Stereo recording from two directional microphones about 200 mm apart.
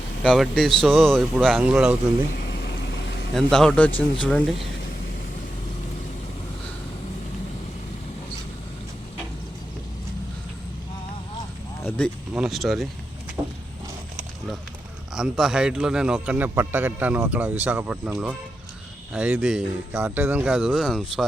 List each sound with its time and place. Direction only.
0.2 s a man's voice: 5° left (ahead or behind)
2.3 s vehicle: 60° left (ahead or behind)
3.3 s a man's voice: centre (ahead or behind)
11.8 s a sound: 5° left (ahead or behind)
12.3 s a man's voice: centre (ahead or behind)
13.4 s a sound: 15° right (ahead or behind)
15.1 s a man's voice: centre (ahead or behind)